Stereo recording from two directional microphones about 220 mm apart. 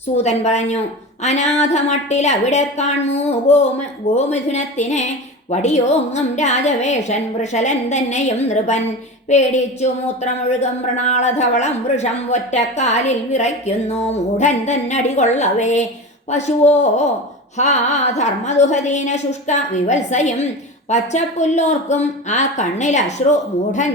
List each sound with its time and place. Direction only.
0.2 s a woman's voice: 30° left (ahead or behind)